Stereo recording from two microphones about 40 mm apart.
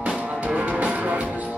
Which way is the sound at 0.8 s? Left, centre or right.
Right.